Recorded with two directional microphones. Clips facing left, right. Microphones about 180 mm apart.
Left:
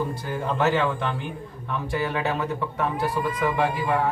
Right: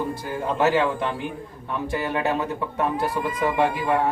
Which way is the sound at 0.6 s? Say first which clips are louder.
Right 2 dB; 15° right (ahead or behind).